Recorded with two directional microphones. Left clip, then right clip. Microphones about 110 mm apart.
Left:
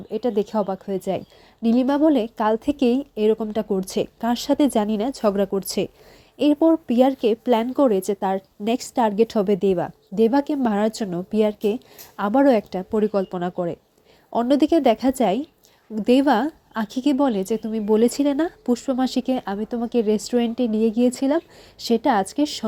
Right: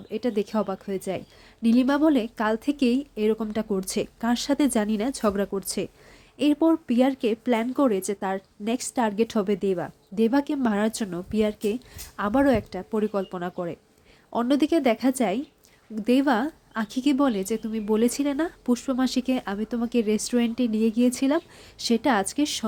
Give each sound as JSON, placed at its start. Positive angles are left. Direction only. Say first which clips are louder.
{"t": 0.1, "sound": "speech", "louder": "left 4 dB", "side_deg": 25}
{"t": 1.6, "sound": "speech", "louder": "left 3 dB", "side_deg": 15}
{"t": 6.5, "sound": "speech", "louder": "left 4 dB", "side_deg": 15}
{"t": 6.8, "sound": "a woman's voice", "louder": "left 5 dB", "side_deg": 25}
{"t": 18.6, "sound": "speech", "louder": "left 3 dB", "side_deg": 20}